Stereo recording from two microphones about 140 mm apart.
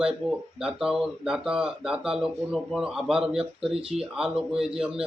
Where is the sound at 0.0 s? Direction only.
5° right (ahead or behind).